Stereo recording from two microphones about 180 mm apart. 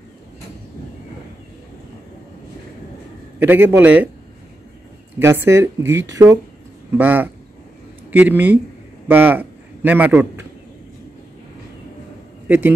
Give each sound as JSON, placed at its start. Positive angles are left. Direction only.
{"t": 3.4, "sound": "speech", "side_deg": -10}
{"t": 5.2, "sound": "a man's voice", "side_deg": -15}
{"t": 12.4, "sound": "a man's voice", "side_deg": -10}